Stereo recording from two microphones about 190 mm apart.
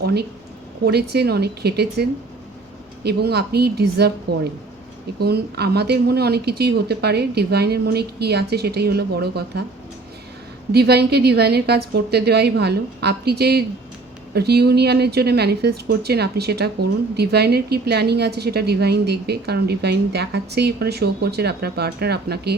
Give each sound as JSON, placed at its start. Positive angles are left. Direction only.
{"t": 0.0, "sound": "a woman's voice", "side_deg": -60}
{"t": 5.2, "sound": "a woman's voice", "side_deg": -55}
{"t": 10.7, "sound": "a woman's voice", "side_deg": -55}